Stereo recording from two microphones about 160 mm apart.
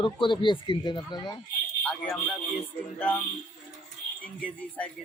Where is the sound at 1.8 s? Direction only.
5° left (ahead or behind).